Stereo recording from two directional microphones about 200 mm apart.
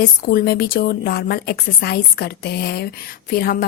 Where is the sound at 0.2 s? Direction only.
50° left (ahead or behind).